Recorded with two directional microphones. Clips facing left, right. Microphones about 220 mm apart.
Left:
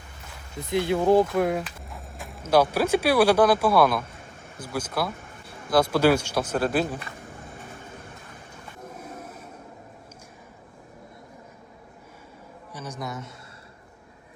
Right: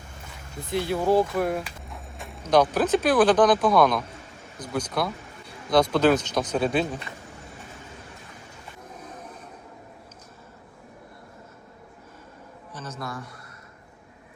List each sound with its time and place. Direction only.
0.7 s speech: 20° left (ahead or behind)
1.9 s speech: centre (ahead or behind)
12.7 s a man's voice: 15° left (ahead or behind)